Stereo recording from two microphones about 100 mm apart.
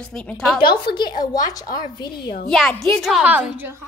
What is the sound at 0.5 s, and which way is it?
A woman's voice, 50° left (ahead or behind).